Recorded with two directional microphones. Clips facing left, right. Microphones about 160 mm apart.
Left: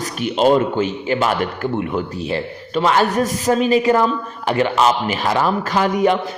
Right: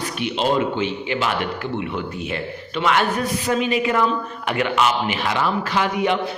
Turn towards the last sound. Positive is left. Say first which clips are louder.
# left 4 dB
turn(degrees=40)  # may be behind; listen again after turning